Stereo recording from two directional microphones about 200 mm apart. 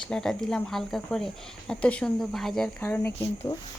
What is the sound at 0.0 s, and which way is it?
Speech, 5° left (ahead or behind).